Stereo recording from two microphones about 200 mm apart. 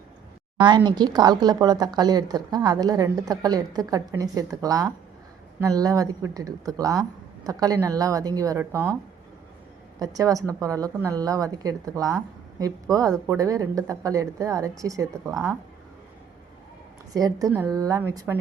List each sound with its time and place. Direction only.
0.9 s a woman's voice: 20° right (ahead or behind)
10.0 s a woman's voice: 15° right (ahead or behind)
17.2 s a woman's voice: 15° right (ahead or behind)